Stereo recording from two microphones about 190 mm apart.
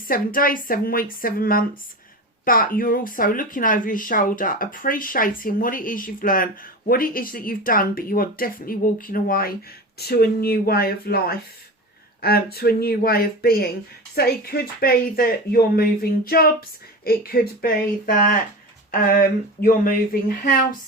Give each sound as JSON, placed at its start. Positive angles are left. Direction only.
{"t": 0.1, "sound": "speech", "side_deg": 50}